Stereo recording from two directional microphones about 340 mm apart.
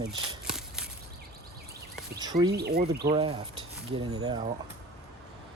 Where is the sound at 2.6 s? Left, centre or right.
Right.